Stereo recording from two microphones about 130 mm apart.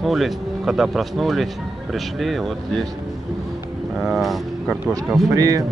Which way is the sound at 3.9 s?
Centre (ahead or behind).